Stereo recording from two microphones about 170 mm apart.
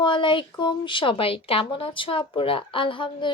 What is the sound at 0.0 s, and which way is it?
A woman's voice, 30° left (ahead or behind).